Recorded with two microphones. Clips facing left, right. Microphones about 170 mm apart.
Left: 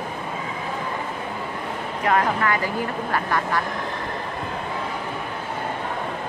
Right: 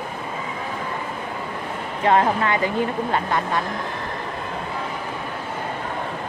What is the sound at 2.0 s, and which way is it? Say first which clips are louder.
Speech: right 3 dB; 25° right (ahead or behind).